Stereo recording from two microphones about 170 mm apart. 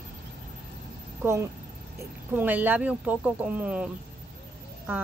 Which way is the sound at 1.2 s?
15° right (ahead or behind).